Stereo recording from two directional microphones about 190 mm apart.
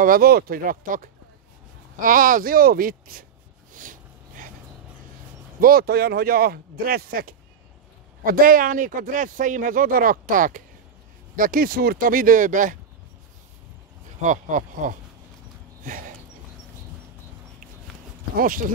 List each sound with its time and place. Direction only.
0.0 s speech: 50° right (ahead or behind)
3.7 s a sound: 45° right (ahead or behind)
5.6 s speech: 50° right (ahead or behind)
14.2 s speech: 40° right (ahead or behind)
15.8 s a sound: 45° right (ahead or behind)
18.3 s speech: 45° right (ahead or behind)